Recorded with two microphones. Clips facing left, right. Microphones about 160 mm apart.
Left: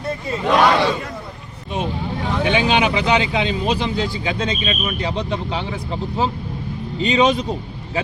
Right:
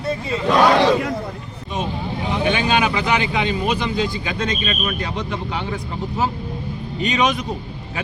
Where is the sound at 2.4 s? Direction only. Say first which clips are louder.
Left 1 dB; 20° left (ahead or behind).